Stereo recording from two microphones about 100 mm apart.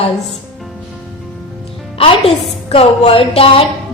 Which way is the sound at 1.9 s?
65° left (ahead or behind).